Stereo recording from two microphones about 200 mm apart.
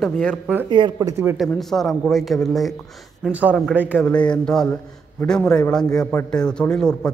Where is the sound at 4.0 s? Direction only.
5° left (ahead or behind).